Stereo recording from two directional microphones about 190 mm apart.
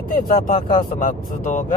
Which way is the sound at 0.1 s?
50° left (ahead or behind).